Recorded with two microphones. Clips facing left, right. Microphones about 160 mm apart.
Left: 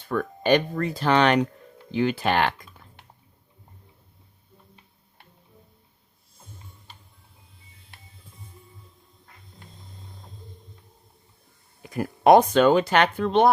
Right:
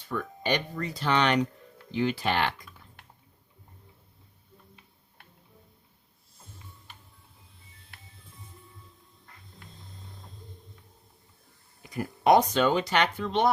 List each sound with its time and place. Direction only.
0.0 s speech: 55° left (ahead or behind)
11.8 s speech: 50° left (ahead or behind)